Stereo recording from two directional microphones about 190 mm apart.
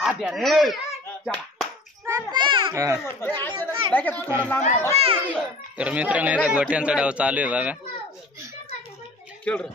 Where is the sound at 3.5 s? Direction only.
25° right (ahead or behind).